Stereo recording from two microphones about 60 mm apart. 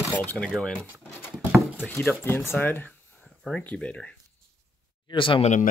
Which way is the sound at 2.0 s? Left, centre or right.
Left.